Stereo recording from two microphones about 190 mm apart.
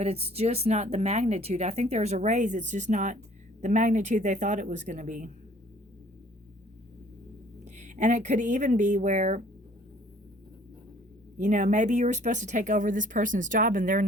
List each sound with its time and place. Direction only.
0.0 s speech: 30° right (ahead or behind)
7.6 s speech: 40° right (ahead or behind)
11.3 s speech: 40° right (ahead or behind)